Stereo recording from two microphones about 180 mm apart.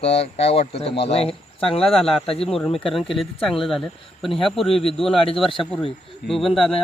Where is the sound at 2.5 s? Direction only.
Centre (ahead or behind).